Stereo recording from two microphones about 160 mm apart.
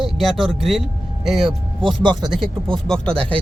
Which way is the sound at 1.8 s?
30° right (ahead or behind).